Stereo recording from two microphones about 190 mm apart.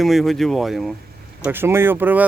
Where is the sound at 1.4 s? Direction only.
10° right (ahead or behind).